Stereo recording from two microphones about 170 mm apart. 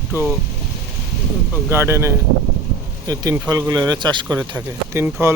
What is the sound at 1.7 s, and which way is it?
Speech, 15° right (ahead or behind).